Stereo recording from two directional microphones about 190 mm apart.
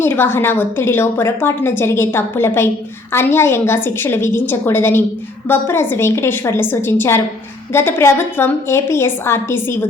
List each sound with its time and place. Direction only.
0.0 s a woman's voice: 10° left (ahead or behind)